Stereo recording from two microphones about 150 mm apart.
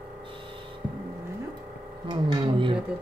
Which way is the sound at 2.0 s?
30° right (ahead or behind).